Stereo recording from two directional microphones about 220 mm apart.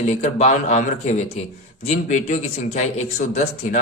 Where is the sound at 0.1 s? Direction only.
30° left (ahead or behind).